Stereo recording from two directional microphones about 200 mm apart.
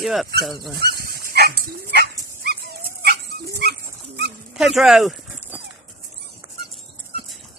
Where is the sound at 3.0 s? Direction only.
55° right (ahead or behind).